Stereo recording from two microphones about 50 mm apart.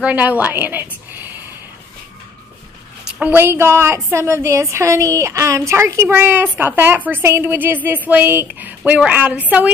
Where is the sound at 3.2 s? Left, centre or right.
Right.